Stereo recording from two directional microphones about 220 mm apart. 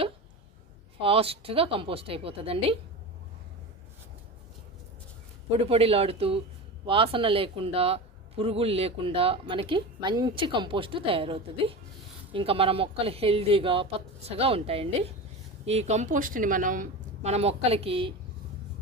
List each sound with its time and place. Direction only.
1.0 s a man's voice: 25° right (ahead or behind)
5.5 s a man's voice: 25° right (ahead or behind)